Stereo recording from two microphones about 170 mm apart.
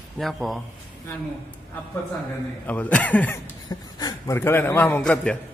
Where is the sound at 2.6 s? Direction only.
10° left (ahead or behind).